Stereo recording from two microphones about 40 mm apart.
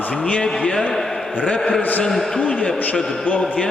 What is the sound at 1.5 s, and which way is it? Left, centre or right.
Speech, left.